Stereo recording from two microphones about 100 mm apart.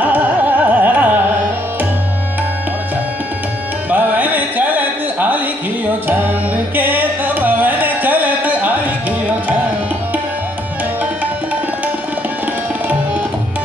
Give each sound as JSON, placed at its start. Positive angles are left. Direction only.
{"t": 0.0, "sound": "music", "side_deg": -15}
{"t": 3.9, "sound": "a sound", "side_deg": -15}
{"t": 6.7, "sound": "music", "side_deg": -20}